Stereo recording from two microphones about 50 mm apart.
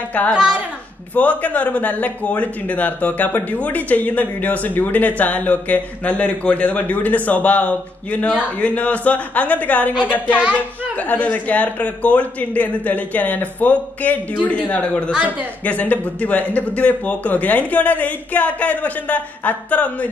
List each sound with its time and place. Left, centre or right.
0.3 s a woman's voice: centre
1.1 s a man's voice: left